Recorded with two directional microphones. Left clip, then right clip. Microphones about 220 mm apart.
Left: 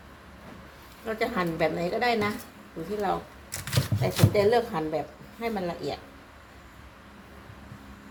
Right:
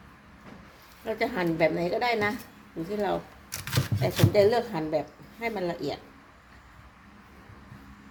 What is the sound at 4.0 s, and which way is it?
A woman's voice, 35° right (ahead or behind).